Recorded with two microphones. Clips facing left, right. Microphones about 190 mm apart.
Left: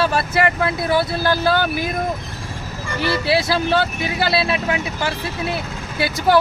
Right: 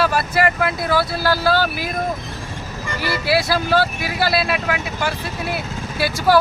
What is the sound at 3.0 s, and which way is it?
Speech, 25° left (ahead or behind).